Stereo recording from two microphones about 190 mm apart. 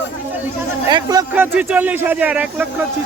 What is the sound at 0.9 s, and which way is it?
A man's voice, 20° right (ahead or behind).